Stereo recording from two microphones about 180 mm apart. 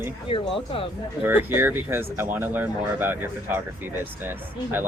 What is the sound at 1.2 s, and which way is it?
Speech, 10° right (ahead or behind).